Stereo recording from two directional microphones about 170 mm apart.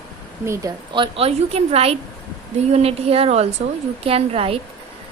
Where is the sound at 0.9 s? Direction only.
30° right (ahead or behind).